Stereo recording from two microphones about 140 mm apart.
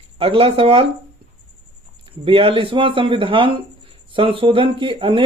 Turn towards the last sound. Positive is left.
turn(degrees=-35)  # may be behind; listen again after turning